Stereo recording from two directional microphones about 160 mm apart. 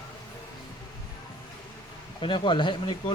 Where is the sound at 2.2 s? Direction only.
30° left (ahead or behind).